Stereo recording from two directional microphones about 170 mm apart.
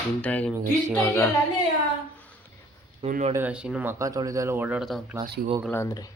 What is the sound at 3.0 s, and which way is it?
Speech, 45° right (ahead or behind).